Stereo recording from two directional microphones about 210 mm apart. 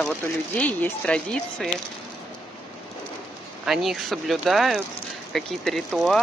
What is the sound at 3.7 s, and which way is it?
Speech, centre (ahead or behind).